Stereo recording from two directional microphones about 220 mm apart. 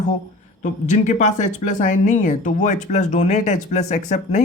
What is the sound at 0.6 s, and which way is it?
Speech, 35° left (ahead or behind).